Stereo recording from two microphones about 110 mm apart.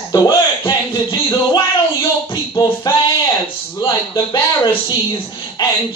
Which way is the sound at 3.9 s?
35° left (ahead or behind).